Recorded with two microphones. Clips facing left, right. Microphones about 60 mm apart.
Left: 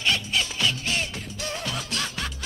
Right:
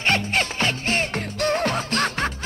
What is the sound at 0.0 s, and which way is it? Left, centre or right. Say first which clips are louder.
Music: right 4 dB; right.